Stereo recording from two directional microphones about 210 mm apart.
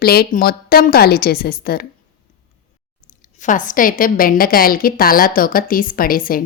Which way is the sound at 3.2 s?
40° left (ahead or behind).